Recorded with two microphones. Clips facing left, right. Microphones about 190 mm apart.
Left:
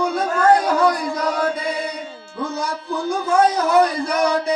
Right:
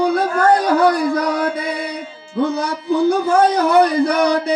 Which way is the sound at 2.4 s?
65° right (ahead or behind).